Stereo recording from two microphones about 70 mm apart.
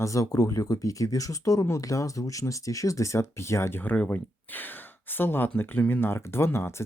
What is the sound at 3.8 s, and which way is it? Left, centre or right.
Speech, left.